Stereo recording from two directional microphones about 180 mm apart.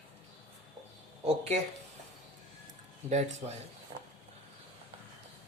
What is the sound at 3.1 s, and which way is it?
Speech, 40° right (ahead or behind).